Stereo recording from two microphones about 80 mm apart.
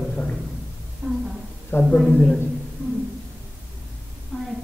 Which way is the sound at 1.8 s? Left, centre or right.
Centre.